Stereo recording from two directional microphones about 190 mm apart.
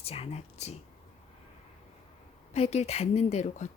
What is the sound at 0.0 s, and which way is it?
Speech, 30° left (ahead or behind).